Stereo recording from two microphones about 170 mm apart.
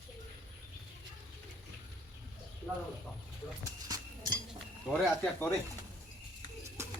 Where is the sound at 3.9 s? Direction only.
25° right (ahead or behind).